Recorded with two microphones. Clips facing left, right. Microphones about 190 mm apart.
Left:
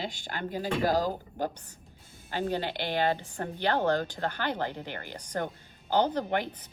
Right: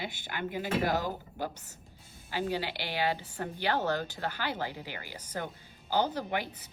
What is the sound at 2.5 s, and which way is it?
A woman's voice, 50° left (ahead or behind).